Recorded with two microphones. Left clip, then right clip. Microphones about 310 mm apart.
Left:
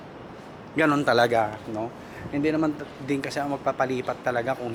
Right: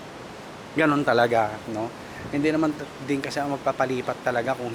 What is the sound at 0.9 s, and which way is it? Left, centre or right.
Speech, centre.